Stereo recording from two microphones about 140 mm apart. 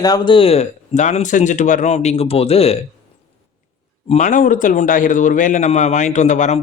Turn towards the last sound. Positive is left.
turn(degrees=60)  # may be behind; listen again after turning